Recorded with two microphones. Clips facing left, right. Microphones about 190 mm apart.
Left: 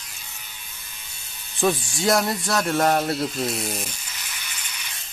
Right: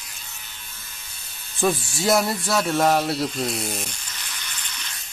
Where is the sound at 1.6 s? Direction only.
Centre (ahead or behind).